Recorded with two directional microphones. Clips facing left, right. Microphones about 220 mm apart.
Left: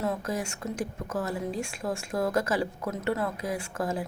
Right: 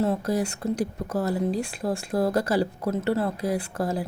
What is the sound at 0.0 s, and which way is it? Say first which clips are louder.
Speech: right 6 dB; 35° right (ahead or behind).